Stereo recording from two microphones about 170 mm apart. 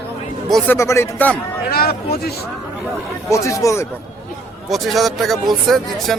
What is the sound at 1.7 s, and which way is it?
Speech, 65° left (ahead or behind).